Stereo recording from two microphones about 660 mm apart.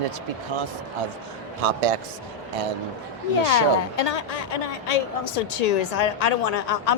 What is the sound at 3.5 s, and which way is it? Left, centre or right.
Speech, left.